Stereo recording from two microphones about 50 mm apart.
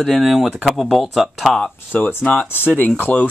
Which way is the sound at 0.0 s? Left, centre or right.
Centre.